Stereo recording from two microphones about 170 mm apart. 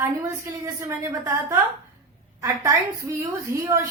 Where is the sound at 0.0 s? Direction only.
20° right (ahead or behind).